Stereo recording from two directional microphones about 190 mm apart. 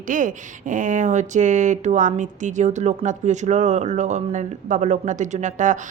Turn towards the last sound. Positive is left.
turn(degrees=-40)  # may be behind; listen again after turning